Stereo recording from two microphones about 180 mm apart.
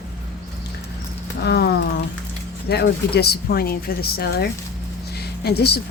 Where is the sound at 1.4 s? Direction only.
65° left (ahead or behind).